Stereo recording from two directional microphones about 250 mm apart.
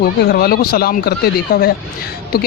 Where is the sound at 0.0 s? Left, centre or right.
Left.